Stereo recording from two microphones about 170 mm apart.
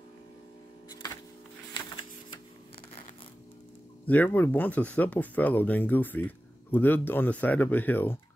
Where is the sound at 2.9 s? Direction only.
45° left (ahead or behind).